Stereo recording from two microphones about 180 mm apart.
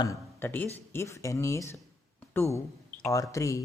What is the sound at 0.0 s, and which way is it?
Speech, 15° left (ahead or behind).